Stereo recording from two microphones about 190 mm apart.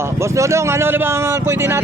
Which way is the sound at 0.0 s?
15° right (ahead or behind).